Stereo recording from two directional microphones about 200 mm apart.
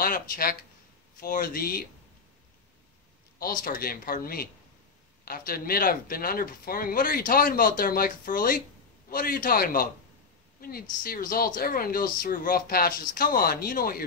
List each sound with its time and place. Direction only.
0.0 s speech: 45° left (ahead or behind)
3.3 s speech: 45° left (ahead or behind)